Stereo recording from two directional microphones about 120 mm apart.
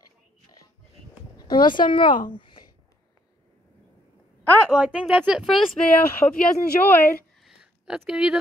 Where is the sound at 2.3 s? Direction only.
40° left (ahead or behind).